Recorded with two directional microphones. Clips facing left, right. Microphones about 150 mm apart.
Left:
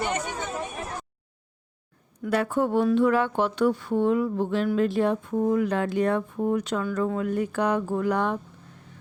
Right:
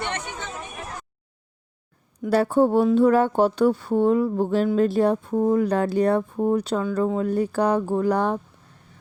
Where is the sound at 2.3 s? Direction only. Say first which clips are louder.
Right 5 dB; 35° right (ahead or behind).